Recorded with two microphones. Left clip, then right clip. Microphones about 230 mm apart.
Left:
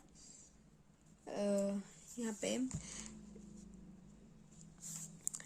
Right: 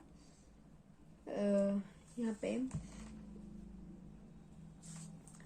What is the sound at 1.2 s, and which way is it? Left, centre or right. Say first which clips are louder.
Speech: right 2 dB; left.